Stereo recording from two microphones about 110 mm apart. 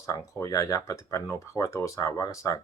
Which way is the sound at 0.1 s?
30° left (ahead or behind).